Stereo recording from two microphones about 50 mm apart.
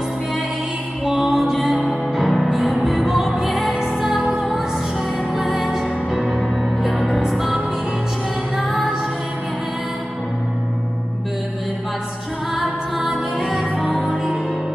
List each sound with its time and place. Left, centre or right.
1.0 s music: centre
13.8 s music: centre